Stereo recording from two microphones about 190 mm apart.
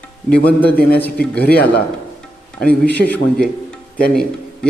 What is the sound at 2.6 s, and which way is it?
Speech, 5° left (ahead or behind).